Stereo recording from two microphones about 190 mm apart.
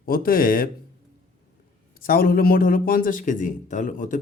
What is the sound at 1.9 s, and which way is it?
Speech, 50° left (ahead or behind).